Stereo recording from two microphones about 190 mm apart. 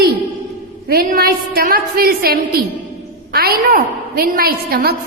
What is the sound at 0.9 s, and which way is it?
A woman's voice, 50° right (ahead or behind).